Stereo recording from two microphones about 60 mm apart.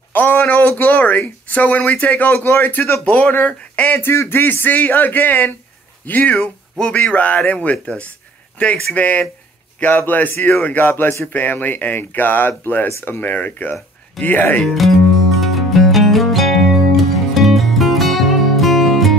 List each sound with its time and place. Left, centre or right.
0.1 s a sound: left
0.7 s speech: left
3.9 s speech: left
14.6 s music: centre